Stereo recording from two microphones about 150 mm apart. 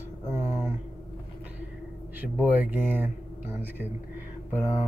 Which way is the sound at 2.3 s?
10° right (ahead or behind).